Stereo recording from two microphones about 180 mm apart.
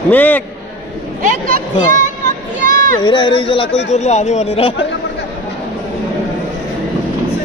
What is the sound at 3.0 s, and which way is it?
Speech, 25° left (ahead or behind).